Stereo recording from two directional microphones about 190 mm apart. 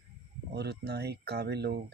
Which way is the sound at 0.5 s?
60° right (ahead or behind).